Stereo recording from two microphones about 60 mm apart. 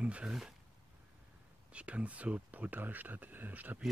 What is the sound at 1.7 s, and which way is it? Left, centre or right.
Speech, centre.